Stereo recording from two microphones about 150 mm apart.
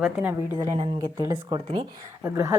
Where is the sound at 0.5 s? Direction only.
25° right (ahead or behind).